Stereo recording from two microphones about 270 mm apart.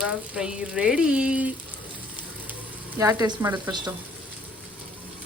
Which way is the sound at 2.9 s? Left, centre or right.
Centre.